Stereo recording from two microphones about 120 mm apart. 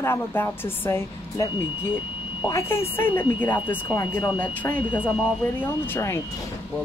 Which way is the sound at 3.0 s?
15° left (ahead or behind).